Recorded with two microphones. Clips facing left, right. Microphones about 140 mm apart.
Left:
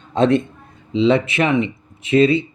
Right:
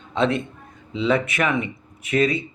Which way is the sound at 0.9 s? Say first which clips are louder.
Left 6 dB; 25° left (ahead or behind).